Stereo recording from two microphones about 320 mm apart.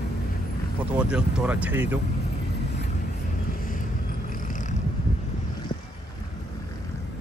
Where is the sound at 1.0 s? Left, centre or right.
Centre.